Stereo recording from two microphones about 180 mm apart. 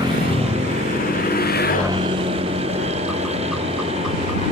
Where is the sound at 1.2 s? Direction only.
60° left (ahead or behind).